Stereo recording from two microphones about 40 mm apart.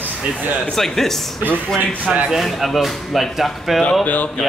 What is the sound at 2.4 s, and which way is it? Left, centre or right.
Speech, centre.